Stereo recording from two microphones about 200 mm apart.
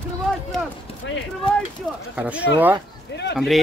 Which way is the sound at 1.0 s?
65° left (ahead or behind).